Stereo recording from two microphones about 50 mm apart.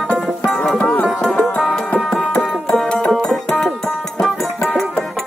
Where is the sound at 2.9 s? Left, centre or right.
Left.